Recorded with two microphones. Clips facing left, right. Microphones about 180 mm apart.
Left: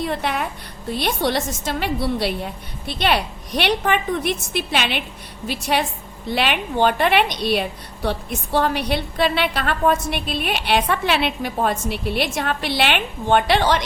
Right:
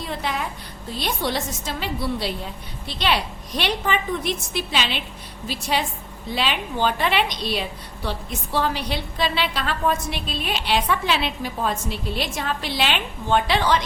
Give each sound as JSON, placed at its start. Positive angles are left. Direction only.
{"t": 0.0, "sound": "a woman's voice", "side_deg": 60}